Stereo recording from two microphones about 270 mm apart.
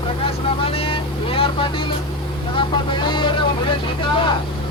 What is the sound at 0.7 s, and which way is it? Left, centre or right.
Speech, centre.